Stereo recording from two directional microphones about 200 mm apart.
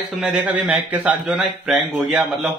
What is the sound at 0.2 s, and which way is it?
A man's voice, 5° right (ahead or behind).